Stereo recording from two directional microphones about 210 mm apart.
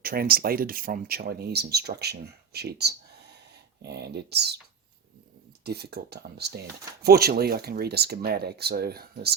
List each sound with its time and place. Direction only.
0.0 s speech: 45° right (ahead or behind)
5.6 s speech: 50° right (ahead or behind)